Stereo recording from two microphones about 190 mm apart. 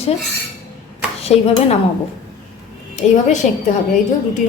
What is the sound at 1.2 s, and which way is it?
Speech, 35° left (ahead or behind).